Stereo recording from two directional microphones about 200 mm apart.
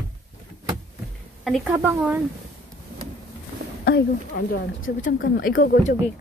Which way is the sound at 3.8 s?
55° left (ahead or behind).